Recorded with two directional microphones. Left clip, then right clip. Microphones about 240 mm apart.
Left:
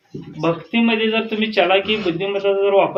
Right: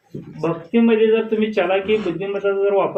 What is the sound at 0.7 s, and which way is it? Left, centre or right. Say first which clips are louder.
A man's voice: right 6 dB; left.